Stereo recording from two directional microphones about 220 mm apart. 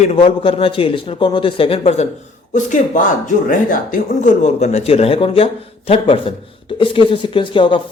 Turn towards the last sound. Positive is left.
turn(degrees=20)  # may be behind; listen again after turning